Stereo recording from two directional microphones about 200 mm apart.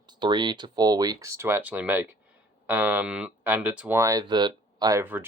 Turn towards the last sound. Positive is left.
turn(degrees=-10)  # may be behind; listen again after turning